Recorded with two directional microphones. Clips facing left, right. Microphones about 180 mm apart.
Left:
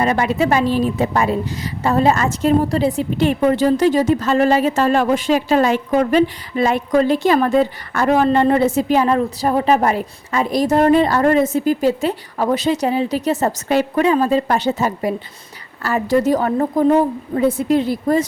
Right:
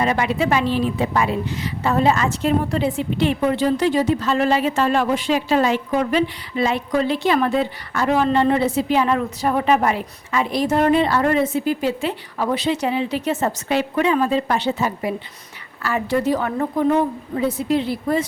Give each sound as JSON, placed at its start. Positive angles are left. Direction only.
{"t": 0.0, "sound": "a woman's voice", "side_deg": 45}
{"t": 17.4, "sound": "a woman's voice", "side_deg": 50}